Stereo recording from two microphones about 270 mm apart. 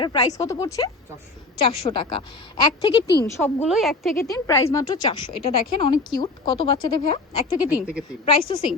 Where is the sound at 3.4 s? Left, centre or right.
Centre.